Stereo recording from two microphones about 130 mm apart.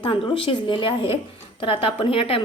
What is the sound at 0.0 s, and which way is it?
A woman's voice, 40° left (ahead or behind).